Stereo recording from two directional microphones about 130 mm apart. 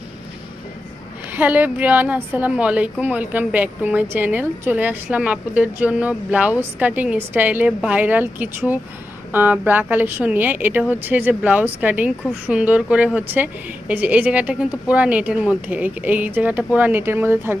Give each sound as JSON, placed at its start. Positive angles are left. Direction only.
{"t": 1.3, "sound": "a woman's voice", "side_deg": -15}